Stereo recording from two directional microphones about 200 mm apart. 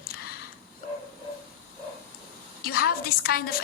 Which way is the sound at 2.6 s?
50° left (ahead or behind).